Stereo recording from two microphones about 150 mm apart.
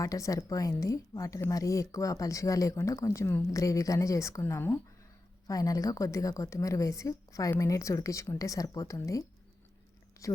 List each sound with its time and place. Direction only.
0.0 s speech: 20° left (ahead or behind)
10.2 s speech: 20° left (ahead or behind)